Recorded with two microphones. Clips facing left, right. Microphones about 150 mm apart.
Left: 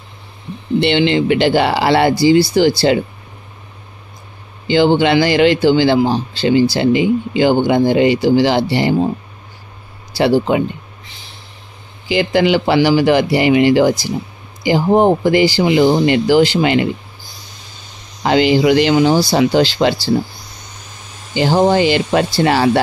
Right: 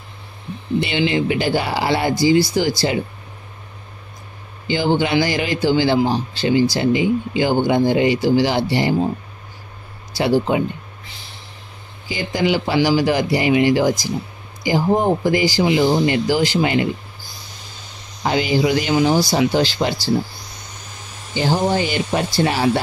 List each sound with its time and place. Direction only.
0.7 s speech: 70° left (ahead or behind)
4.6 s speech: 75° left (ahead or behind)
10.1 s speech: 70° left (ahead or behind)
12.1 s speech: 80° left
18.2 s speech: 75° left (ahead or behind)
21.4 s speech: 85° left